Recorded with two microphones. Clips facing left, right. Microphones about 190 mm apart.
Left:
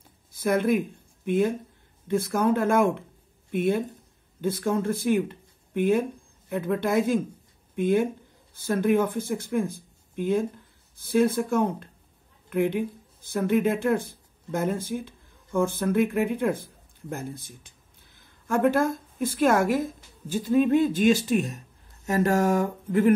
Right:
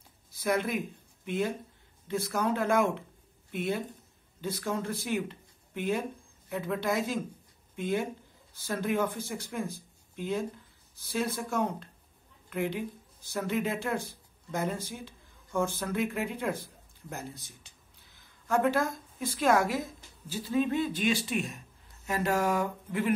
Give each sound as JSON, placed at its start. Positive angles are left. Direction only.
{"t": 0.3, "sound": "speech", "side_deg": 50}